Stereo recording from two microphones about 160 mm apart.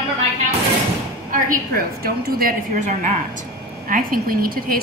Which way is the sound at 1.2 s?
60° right (ahead or behind).